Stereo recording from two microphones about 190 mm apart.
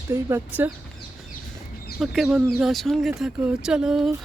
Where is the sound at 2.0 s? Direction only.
Centre (ahead or behind).